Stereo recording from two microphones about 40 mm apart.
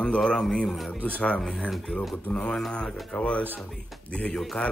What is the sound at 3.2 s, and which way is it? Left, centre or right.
Speech, left.